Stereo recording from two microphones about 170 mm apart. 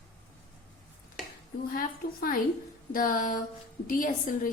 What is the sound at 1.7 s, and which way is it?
A woman's voice, 55° left (ahead or behind).